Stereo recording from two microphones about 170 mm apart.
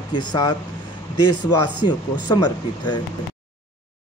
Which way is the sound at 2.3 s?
25° left (ahead or behind).